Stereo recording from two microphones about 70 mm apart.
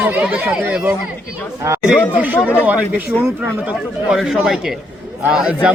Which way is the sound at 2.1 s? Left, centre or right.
Right.